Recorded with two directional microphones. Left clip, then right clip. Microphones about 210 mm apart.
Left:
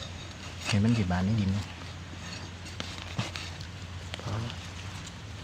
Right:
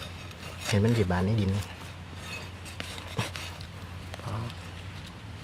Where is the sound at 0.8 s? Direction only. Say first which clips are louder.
Right 5 dB; 50° right (ahead or behind).